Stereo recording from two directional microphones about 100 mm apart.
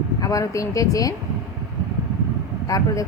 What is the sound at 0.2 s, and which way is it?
Speech, 35° left (ahead or behind).